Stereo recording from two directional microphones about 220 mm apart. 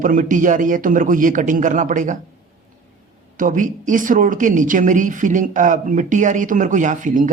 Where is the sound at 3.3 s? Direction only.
35° right (ahead or behind).